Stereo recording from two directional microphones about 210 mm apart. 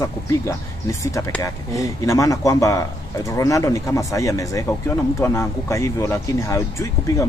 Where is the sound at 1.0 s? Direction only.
15° left (ahead or behind).